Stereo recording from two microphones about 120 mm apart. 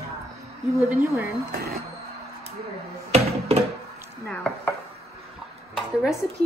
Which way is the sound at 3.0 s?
65° right (ahead or behind).